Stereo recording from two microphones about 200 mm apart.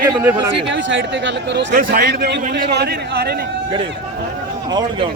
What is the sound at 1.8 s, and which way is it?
A man's voice, 45° right (ahead or behind).